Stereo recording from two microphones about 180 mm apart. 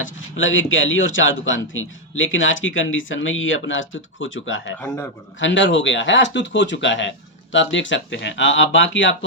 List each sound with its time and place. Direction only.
0.0 s a man's voice: 90° left